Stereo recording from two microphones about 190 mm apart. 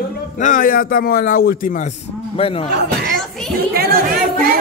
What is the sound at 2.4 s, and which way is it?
Speech, 30° left (ahead or behind).